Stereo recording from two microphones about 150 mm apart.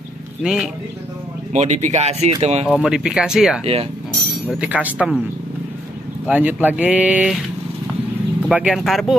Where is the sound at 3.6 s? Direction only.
40° right (ahead or behind).